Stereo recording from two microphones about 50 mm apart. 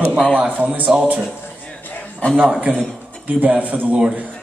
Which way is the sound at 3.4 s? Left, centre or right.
Right.